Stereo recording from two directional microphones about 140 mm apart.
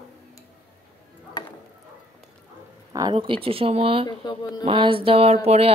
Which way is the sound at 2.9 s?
30° right (ahead or behind).